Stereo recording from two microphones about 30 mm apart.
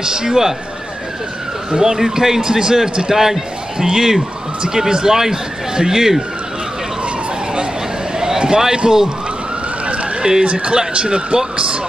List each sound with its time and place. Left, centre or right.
0.0 s a man's voice: right
1.7 s a man's voice: centre
8.2 s a sound: right
8.7 s a man's voice: right
10.4 s speech: right